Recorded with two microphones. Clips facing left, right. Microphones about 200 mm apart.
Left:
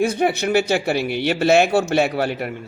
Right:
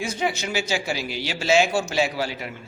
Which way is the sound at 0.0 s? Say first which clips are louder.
Left 8 dB; 60° left (ahead or behind).